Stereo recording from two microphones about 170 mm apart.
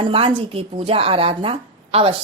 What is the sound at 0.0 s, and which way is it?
Speech, 30° right (ahead or behind).